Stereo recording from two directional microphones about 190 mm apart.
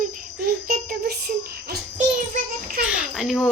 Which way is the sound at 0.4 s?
50° right (ahead or behind).